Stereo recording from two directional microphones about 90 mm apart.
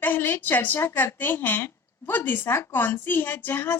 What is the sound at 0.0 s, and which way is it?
A woman's voice, 20° left (ahead or behind).